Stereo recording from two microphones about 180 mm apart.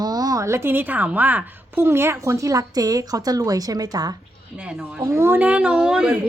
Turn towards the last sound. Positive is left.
turn(degrees=-5)  # may be behind; listen again after turning